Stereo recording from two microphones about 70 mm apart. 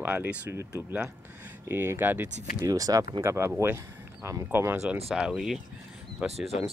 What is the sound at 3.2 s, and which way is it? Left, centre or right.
Speech, right.